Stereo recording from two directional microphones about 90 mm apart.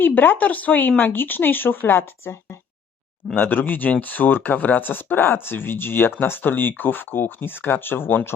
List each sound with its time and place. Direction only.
0.0 s speech: 20° left (ahead or behind)